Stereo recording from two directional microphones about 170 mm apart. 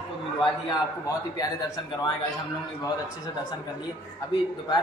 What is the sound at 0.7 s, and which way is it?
Speech, 20° left (ahead or behind).